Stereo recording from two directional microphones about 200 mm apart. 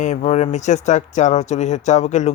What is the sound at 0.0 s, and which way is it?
Speech, 35° left (ahead or behind).